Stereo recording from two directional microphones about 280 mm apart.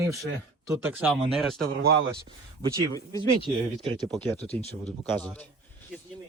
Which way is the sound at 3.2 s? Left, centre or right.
Centre.